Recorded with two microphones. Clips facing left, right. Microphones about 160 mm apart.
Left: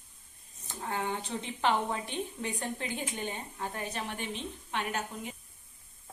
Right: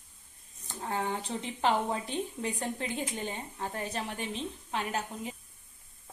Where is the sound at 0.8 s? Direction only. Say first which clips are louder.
Right 1 dB; 30° right (ahead or behind).